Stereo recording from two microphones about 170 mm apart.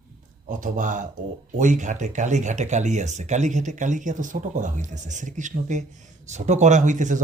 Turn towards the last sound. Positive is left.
turn(degrees=-45)  # may be behind; listen again after turning